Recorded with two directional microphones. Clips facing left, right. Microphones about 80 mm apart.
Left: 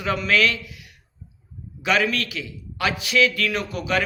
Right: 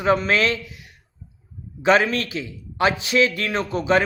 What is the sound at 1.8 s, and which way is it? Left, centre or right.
A man's voice, right.